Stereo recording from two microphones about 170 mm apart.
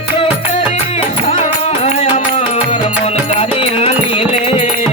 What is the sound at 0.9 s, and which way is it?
Music, 35° left (ahead or behind).